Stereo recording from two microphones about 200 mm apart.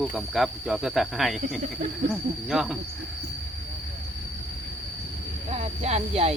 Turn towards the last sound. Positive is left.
turn(degrees=-30)  # may be behind; listen again after turning